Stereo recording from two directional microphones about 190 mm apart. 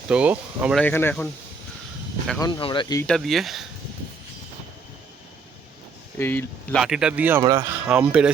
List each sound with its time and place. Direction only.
0.1 s speech: 5° right (ahead or behind)
0.8 s speech: 10° left (ahead or behind)
2.4 s speech: 25° left (ahead or behind)
3.0 s speech: 5° left (ahead or behind)
6.1 s speech: 10° left (ahead or behind)
6.8 s speech: 5° right (ahead or behind)